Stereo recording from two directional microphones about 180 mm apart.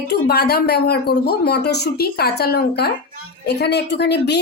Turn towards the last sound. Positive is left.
turn(degrees=70)  # may be behind; listen again after turning